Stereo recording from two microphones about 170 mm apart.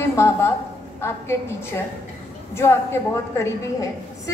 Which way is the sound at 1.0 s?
15° left (ahead or behind).